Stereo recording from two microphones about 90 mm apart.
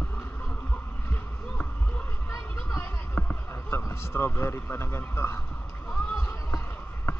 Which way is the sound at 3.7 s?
25° left (ahead or behind).